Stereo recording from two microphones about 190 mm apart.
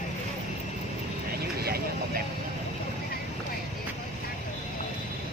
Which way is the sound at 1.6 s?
55° right (ahead or behind).